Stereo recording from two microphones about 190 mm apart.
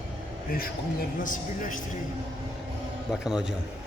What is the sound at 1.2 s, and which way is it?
Speech, 45° left (ahead or behind).